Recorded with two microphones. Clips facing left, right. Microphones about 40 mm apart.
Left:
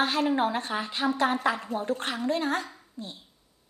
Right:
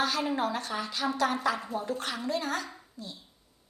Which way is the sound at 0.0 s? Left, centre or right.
Left.